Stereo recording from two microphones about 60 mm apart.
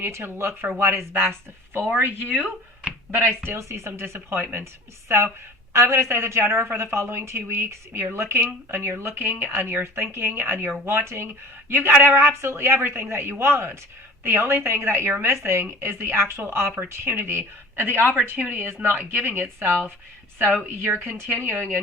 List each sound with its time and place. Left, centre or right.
0.0 s a woman's voice: right
2.3 s speech: right
3.6 s a woman's voice: right